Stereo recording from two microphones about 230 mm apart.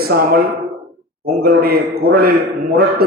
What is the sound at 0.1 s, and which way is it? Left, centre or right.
A man's voice, right.